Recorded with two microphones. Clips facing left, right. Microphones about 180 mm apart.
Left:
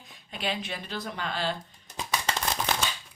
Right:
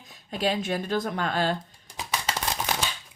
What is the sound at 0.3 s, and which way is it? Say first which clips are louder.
Speech: right 7 dB; 40° right (ahead or behind).